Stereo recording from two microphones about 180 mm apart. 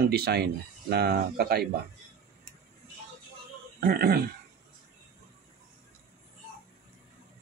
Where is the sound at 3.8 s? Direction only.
55° right (ahead or behind).